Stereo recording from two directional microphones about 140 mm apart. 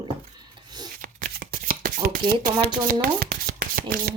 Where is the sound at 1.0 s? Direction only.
90° right.